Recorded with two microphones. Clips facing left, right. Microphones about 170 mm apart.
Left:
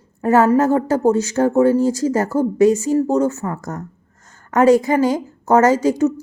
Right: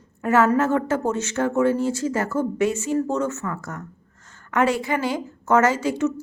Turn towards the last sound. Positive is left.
turn(degrees=40)  # may be behind; listen again after turning